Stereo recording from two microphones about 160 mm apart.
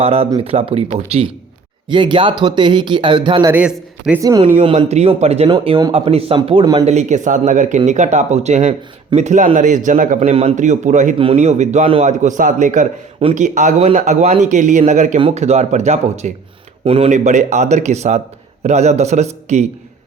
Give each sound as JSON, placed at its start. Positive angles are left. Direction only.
{"t": 0.0, "sound": "speech", "side_deg": -35}
{"t": 1.9, "sound": "speech", "side_deg": -30}
{"t": 3.5, "sound": "speech", "side_deg": -10}
{"t": 4.6, "sound": "speech", "side_deg": -40}
{"t": 5.5, "sound": "speech", "side_deg": -30}
{"t": 6.8, "sound": "a man's voice", "side_deg": -45}
{"t": 11.2, "sound": "a man's voice", "side_deg": -40}